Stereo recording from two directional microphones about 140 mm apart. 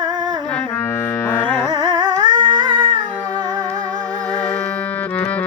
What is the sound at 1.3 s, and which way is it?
Carnatic music, 15° left (ahead or behind).